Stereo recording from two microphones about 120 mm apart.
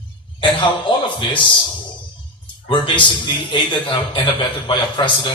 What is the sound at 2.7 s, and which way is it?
A man's voice, 40° left (ahead or behind).